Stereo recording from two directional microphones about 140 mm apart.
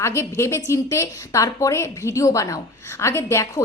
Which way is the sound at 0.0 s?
20° left (ahead or behind).